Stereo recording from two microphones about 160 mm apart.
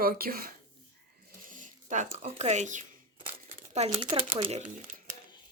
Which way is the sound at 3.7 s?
40° right (ahead or behind).